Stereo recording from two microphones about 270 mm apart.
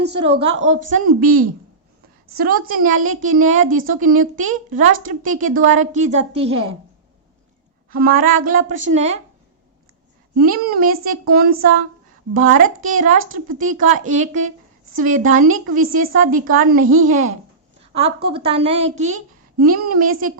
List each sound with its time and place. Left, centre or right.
0.2 s a woman's voice: right
7.9 s a woman's voice: right
10.3 s a woman's voice: right
19.5 s a woman's voice: right